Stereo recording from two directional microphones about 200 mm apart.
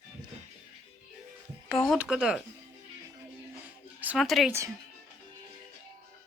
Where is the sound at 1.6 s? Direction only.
Centre (ahead or behind).